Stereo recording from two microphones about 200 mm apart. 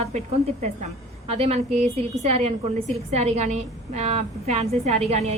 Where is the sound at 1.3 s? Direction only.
30° right (ahead or behind).